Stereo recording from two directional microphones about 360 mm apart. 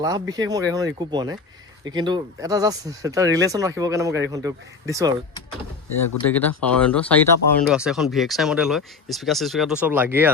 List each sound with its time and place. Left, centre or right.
0.0 s speech: centre
6.2 s speech: centre